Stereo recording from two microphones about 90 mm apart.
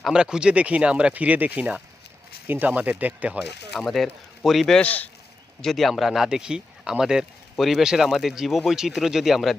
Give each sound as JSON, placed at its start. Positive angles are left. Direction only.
{"t": 0.0, "sound": "speech", "side_deg": -10}
{"t": 3.4, "sound": "speech", "side_deg": 0}
{"t": 4.8, "sound": "speech", "side_deg": 15}
{"t": 5.6, "sound": "speech", "side_deg": 0}